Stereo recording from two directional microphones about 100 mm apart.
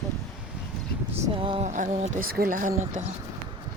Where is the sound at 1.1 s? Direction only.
75° right (ahead or behind).